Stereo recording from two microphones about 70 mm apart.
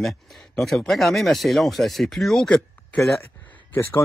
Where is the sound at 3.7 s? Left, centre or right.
Left.